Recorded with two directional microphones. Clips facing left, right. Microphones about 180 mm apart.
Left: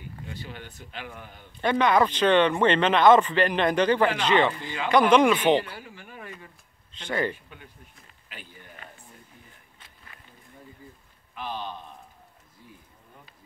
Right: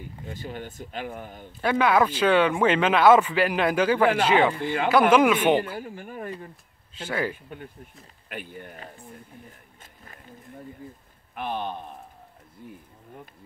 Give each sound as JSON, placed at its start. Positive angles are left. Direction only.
{"t": 0.3, "sound": "speech", "side_deg": -45}
{"t": 1.6, "sound": "speech", "side_deg": -5}
{"t": 4.6, "sound": "speech", "side_deg": -55}
{"t": 5.1, "sound": "speech", "side_deg": -5}
{"t": 5.6, "sound": "speech", "side_deg": -45}
{"t": 6.9, "sound": "speech", "side_deg": -5}
{"t": 7.4, "sound": "speech", "side_deg": -45}
{"t": 9.8, "sound": "a sound", "side_deg": -40}
{"t": 11.3, "sound": "speech", "side_deg": -55}